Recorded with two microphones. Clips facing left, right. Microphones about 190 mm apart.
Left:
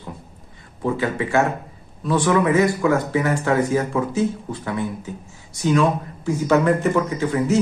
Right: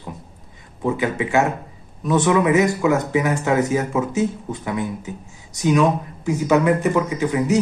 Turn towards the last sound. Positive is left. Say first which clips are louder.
# right 1 dB
turn(degrees=-15)  # may be behind; listen again after turning